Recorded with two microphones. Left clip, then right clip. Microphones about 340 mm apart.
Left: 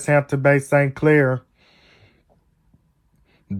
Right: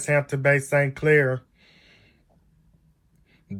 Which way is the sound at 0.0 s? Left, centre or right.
Centre.